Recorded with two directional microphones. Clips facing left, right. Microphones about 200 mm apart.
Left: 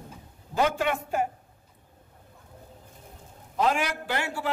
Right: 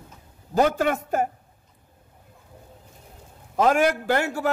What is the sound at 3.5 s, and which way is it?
Speech, 45° right (ahead or behind).